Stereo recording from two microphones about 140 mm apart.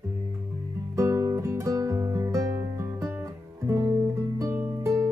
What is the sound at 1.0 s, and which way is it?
Music, 20° right (ahead or behind).